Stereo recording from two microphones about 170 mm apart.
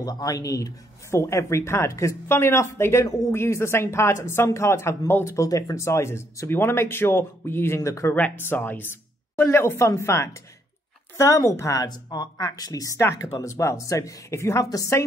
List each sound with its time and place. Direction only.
0.0 s a woman's voice: 20° left (ahead or behind)